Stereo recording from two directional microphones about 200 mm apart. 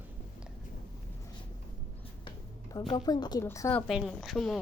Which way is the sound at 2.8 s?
15° left (ahead or behind).